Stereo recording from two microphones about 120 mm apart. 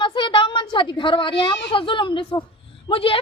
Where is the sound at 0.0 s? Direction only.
40° left (ahead or behind).